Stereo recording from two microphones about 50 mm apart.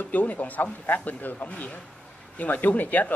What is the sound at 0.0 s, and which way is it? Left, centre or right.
A man's voice, left.